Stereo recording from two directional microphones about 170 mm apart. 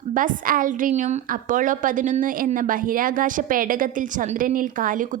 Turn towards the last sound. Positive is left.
turn(degrees=-50)  # may be behind; listen again after turning